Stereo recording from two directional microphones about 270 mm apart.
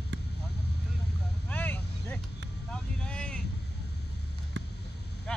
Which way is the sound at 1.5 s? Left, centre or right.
Centre.